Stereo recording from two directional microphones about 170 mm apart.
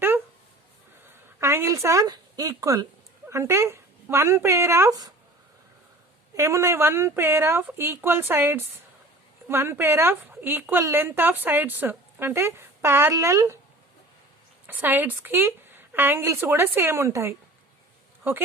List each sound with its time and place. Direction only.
1.4 s a woman's voice: 15° right (ahead or behind)
6.3 s a woman's voice: 20° right (ahead or behind)
14.7 s a woman's voice: 10° right (ahead or behind)